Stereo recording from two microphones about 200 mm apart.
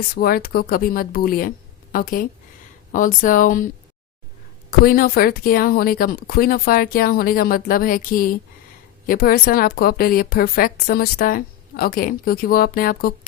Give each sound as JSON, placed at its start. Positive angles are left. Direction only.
{"t": 0.1, "sound": "speech", "side_deg": 50}
{"t": 4.7, "sound": "speech", "side_deg": 45}